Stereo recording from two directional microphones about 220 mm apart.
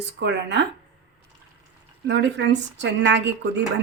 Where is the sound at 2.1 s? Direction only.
55° right (ahead or behind).